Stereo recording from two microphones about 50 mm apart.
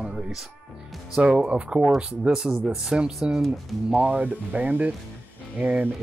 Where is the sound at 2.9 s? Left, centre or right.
Centre.